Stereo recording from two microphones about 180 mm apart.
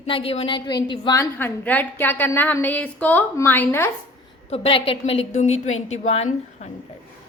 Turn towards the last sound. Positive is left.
turn(degrees=40)  # may be behind; listen again after turning